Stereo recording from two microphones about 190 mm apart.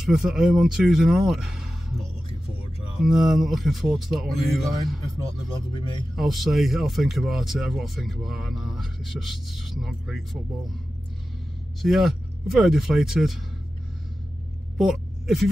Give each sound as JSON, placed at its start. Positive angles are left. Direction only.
{"t": 0.0, "sound": "speech", "side_deg": -5}
{"t": 3.0, "sound": "speech", "side_deg": 0}
{"t": 5.7, "sound": "speech", "side_deg": 25}
{"t": 6.1, "sound": "speech", "side_deg": 0}
{"t": 11.8, "sound": "speech", "side_deg": 0}
{"t": 14.8, "sound": "speech", "side_deg": 0}